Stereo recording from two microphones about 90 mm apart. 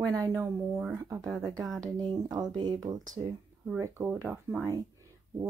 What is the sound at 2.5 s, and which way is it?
Speech, 50° right (ahead or behind).